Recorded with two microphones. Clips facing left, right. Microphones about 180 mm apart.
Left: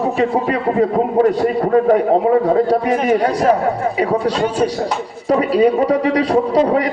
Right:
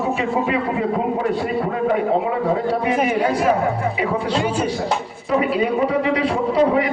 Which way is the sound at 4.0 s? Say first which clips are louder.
Left 5 dB; 40° left (ahead or behind).